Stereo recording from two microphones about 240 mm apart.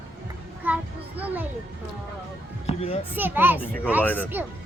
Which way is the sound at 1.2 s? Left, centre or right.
Centre.